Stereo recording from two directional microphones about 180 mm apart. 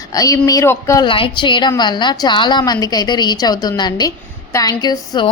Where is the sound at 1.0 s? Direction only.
30° left (ahead or behind).